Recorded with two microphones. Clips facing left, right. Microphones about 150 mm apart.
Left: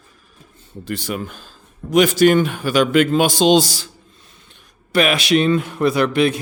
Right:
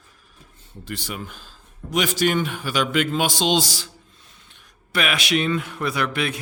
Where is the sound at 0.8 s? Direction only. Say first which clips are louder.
Left 7 dB; 55° left (ahead or behind).